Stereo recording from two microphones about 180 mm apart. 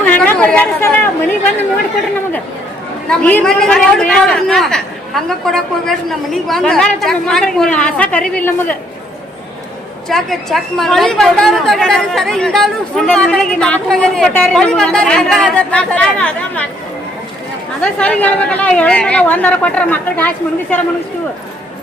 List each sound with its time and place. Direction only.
0.0 s chatter: 10° left (ahead or behind)
3.1 s a woman's voice: 5° left (ahead or behind)
10.1 s a woman's voice: centre (ahead or behind)
17.7 s a woman's voice: 5° left (ahead or behind)